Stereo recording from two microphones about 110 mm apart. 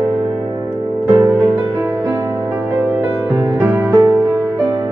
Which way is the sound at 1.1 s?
30° right (ahead or behind).